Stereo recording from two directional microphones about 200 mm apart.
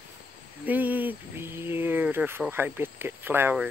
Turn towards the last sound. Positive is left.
turn(degrees=-10)  # may be behind; listen again after turning